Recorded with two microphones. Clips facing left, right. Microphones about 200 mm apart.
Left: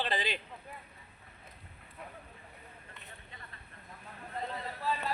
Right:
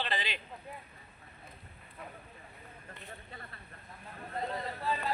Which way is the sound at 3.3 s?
40° right (ahead or behind).